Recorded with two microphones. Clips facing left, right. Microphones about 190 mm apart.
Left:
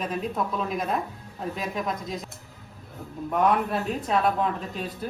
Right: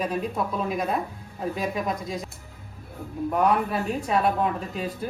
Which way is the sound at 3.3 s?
Centre (ahead or behind).